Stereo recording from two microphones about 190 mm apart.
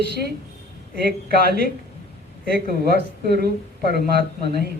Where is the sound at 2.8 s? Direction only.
55° right (ahead or behind).